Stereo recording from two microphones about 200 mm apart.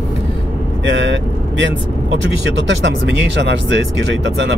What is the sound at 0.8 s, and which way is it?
Speech, 65° right (ahead or behind).